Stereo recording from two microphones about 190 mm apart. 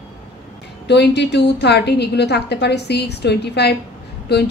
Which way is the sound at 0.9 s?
65° left (ahead or behind).